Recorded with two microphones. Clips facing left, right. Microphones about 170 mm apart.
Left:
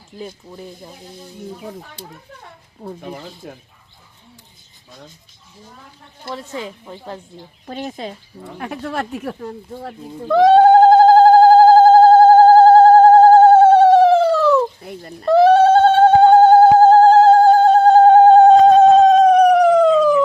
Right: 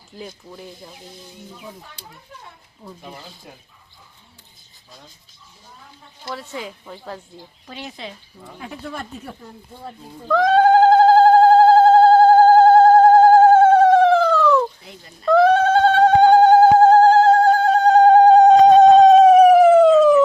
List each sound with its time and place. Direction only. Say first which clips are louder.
2.8 s speech: left 8 dB; 65° left (ahead or behind)
6.2 s a woman's voice: left 3 dB; 25° left (ahead or behind)
6.8 s a woman's voice: left 2 dB; 15° left (ahead or behind)
7.7 s speech: left 7 dB; 45° left (ahead or behind)
8.5 s speech: left 7 dB; 70° left (ahead or behind); by 9.9 s 90° left
10.2 s telephone bell ringing: left 5 dB; 30° left (ahead or behind)
14.8 s speech: left 10 dB; 55° left (ahead or behind)
15.3 s bleat: left 4 dB; 30° left (ahead or behind)
16.4 s a sound: left 2 dB; 30° left (ahead or behind)
18.6 s a sound: even; 5° left (ahead or behind)